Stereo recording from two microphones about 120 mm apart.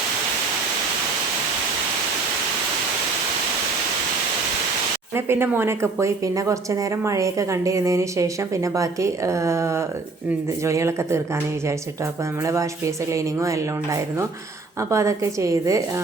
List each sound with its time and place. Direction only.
5.1 s a woman's voice: 20° right (ahead or behind)
12.5 s a woman's voice: 25° right (ahead or behind)